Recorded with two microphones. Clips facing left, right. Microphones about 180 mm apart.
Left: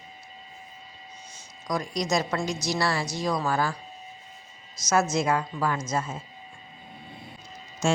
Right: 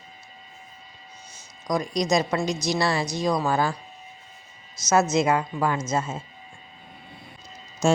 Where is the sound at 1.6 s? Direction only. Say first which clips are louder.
Right 4 dB; 20° right (ahead or behind).